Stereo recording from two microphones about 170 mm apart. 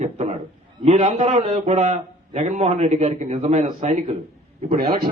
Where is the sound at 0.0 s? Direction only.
45° right (ahead or behind).